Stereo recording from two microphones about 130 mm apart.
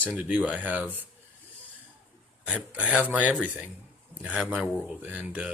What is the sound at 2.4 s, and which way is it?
Speech, 10° right (ahead or behind).